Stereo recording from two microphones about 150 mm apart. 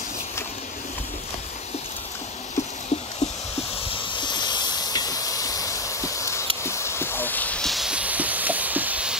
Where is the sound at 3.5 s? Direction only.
35° left (ahead or behind).